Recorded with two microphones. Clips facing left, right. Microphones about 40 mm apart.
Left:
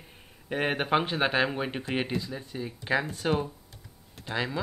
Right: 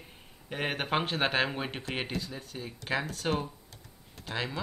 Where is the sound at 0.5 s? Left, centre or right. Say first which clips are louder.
Left 5 dB; left.